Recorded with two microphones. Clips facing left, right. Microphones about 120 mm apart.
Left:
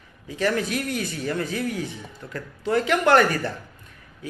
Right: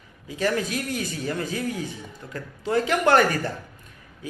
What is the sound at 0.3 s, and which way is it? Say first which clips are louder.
Speech: left 1 dB; 30° right (ahead or behind).